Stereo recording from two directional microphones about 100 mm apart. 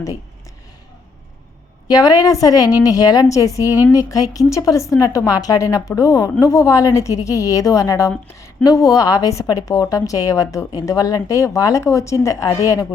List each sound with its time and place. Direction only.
1.9 s a woman's voice: 40° left (ahead or behind)